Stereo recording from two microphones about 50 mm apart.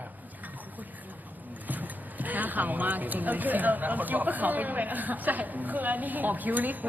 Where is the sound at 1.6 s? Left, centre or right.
Right.